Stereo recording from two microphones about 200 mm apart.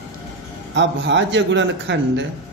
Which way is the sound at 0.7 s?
65° right (ahead or behind).